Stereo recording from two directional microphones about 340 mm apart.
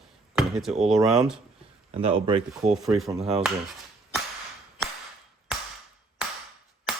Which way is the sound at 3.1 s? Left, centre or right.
Centre.